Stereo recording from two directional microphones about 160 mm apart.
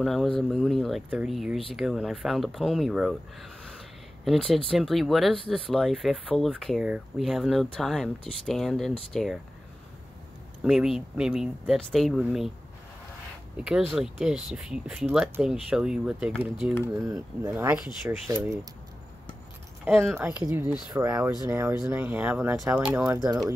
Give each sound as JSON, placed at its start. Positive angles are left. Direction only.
{"t": 0.0, "sound": "speech", "side_deg": 0}
{"t": 10.6, "sound": "speech", "side_deg": -5}
{"t": 13.6, "sound": "speech", "side_deg": -5}
{"t": 16.9, "sound": "speech", "side_deg": -20}
{"t": 19.8, "sound": "speech", "side_deg": 0}
{"t": 20.4, "sound": "speech", "side_deg": -15}
{"t": 23.1, "sound": "speech", "side_deg": -25}